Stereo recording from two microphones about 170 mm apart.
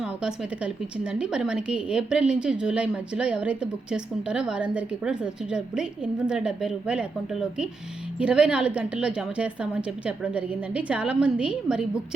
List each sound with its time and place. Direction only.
0.0 s a woman's voice: 5° right (ahead or behind)